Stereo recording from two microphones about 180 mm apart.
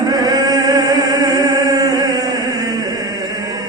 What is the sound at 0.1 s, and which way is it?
Chant, 20° right (ahead or behind).